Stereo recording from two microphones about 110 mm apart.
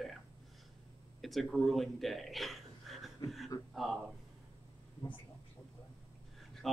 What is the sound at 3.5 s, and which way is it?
Speech, 30° left (ahead or behind).